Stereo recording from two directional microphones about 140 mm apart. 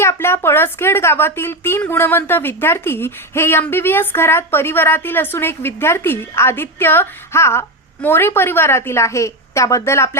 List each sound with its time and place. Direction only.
0.0 s a woman's voice: 20° left (ahead or behind)